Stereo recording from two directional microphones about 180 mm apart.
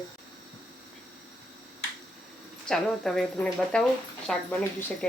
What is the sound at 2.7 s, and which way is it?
Speech, centre (ahead or behind).